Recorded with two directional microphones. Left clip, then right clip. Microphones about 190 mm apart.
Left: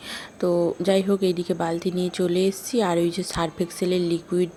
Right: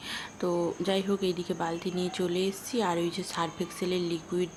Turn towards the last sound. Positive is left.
turn(degrees=30)  # may be behind; listen again after turning